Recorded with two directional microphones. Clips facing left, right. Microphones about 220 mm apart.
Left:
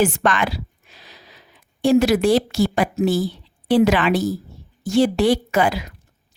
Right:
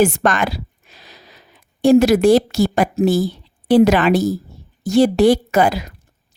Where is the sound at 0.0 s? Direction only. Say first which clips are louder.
Right 3 dB; 40° right (ahead or behind).